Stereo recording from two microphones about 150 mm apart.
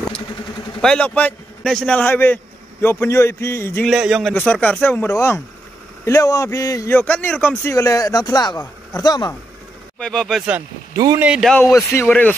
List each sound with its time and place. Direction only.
0.7 s speech: 5° left (ahead or behind)
3.8 s speech: 5° right (ahead or behind)
7.7 s speech: 20° left (ahead or behind)
9.9 s speech: 5° left (ahead or behind)
11.5 s speech: 20° left (ahead or behind)